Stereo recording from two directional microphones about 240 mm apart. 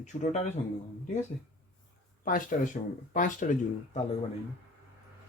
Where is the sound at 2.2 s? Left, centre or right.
Left.